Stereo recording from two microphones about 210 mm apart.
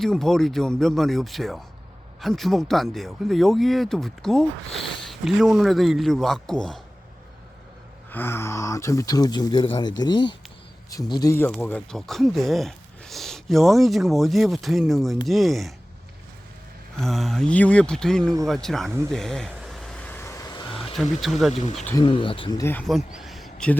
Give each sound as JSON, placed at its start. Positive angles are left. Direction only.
{"t": 0.0, "sound": "speech", "side_deg": 0}
{"t": 8.1, "sound": "speech", "side_deg": 10}
{"t": 17.0, "sound": "speech", "side_deg": 0}
{"t": 19.1, "sound": "a sound", "side_deg": 0}
{"t": 20.9, "sound": "speech", "side_deg": 0}
{"t": 21.5, "sound": "speech", "side_deg": 30}
{"t": 22.9, "sound": "a sound", "side_deg": 0}